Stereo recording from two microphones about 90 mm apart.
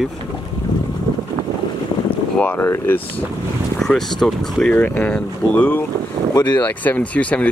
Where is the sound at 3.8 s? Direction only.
5° left (ahead or behind).